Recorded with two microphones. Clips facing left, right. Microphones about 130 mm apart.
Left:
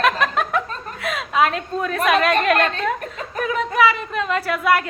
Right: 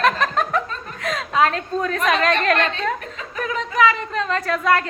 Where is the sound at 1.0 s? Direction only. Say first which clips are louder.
Even; 10° left (ahead or behind).